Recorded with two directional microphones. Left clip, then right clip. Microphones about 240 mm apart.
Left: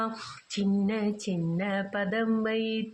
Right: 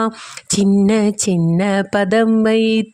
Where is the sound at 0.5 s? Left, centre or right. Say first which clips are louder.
Right 15 dB; right.